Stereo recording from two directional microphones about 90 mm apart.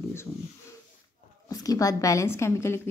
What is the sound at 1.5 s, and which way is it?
A woman's voice, 40° left (ahead or behind).